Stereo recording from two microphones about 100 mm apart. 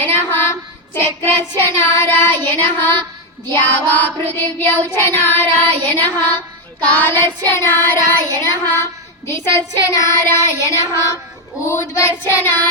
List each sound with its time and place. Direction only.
0.0 s child singing: 20° left (ahead or behind)